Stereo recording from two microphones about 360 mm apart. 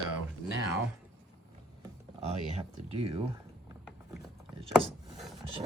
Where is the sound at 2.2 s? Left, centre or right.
Centre.